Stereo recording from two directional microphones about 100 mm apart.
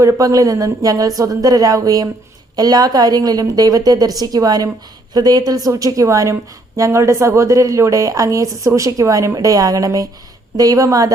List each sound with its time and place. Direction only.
0.0 s speech: 35° right (ahead or behind)